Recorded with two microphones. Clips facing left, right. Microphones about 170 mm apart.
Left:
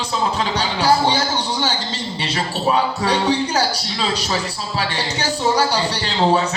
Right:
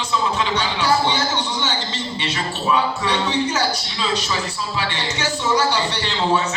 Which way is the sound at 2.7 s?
35° left (ahead or behind).